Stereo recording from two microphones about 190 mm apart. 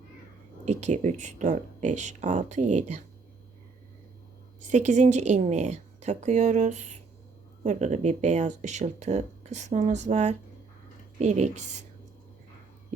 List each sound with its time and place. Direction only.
0.7 s speech: 35° right (ahead or behind)
4.6 s speech: 40° right (ahead or behind)